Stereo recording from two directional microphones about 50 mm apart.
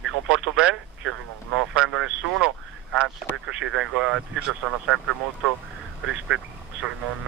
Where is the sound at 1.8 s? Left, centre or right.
Right.